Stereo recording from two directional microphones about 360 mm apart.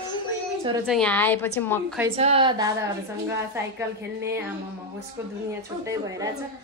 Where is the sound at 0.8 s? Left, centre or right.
Centre.